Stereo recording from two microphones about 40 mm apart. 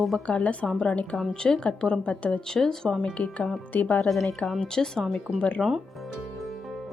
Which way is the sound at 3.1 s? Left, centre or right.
Left.